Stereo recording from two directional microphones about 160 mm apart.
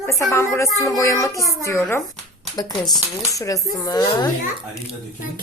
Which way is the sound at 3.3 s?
20° left (ahead or behind).